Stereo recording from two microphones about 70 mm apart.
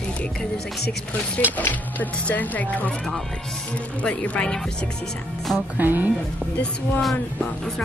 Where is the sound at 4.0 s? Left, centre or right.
Centre.